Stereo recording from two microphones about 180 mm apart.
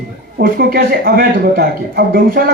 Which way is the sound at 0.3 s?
55° right (ahead or behind).